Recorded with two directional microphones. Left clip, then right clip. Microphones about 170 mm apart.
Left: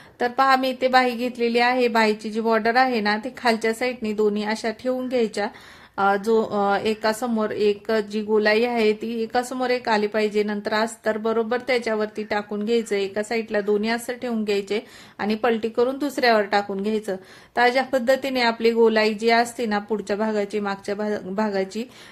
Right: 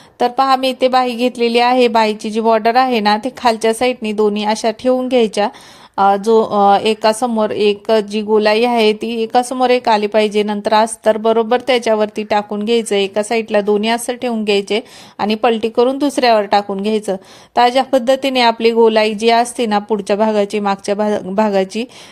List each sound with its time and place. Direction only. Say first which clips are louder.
0.2 s speech: right 6 dB; 30° right (ahead or behind)